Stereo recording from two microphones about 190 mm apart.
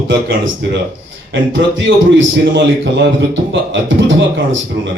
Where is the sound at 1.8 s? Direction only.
70° right (ahead or behind).